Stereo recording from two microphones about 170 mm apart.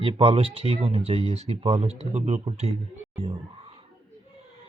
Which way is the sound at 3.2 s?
35° right (ahead or behind).